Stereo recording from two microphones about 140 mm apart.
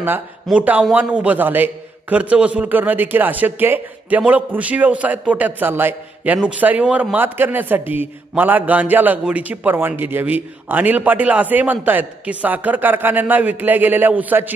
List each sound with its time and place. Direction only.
0.0 s a man's voice: 10° right (ahead or behind)